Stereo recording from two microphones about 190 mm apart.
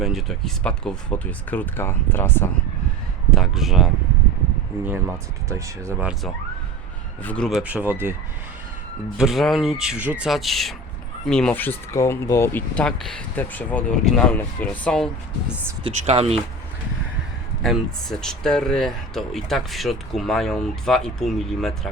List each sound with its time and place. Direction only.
0.0 s speech: centre (ahead or behind)
3.3 s speech: centre (ahead or behind)
4.9 s speech: 10° right (ahead or behind)
7.2 s speech: 5° left (ahead or behind); by 8.1 s 10° right (ahead or behind)
9.1 s speech: centre (ahead or behind)
15.8 s speech: 35° right (ahead or behind)
17.6 s speech: centre (ahead or behind)